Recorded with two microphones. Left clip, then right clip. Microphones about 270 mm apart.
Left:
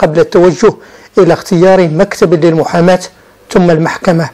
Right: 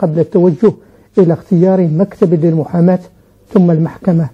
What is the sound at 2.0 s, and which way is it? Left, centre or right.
Speech, centre.